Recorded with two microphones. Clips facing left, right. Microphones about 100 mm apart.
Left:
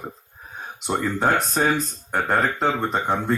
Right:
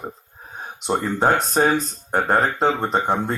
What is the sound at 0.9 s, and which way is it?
Speech, 30° right (ahead or behind).